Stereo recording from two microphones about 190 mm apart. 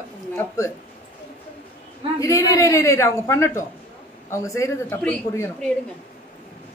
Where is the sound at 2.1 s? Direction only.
15° left (ahead or behind).